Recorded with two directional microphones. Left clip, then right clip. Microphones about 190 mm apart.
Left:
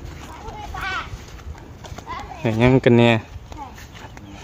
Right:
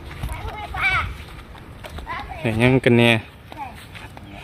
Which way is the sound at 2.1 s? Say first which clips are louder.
Left 1 dB; 10° left (ahead or behind).